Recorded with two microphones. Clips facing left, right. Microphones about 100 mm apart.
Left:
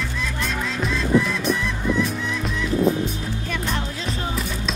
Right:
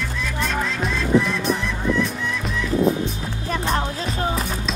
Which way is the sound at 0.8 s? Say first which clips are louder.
Even; centre (ahead or behind).